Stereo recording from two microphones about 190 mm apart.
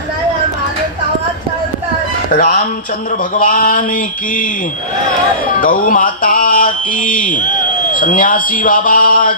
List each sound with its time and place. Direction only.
2.3 s speech: 50° left (ahead or behind)
5.5 s speech: 45° left (ahead or behind)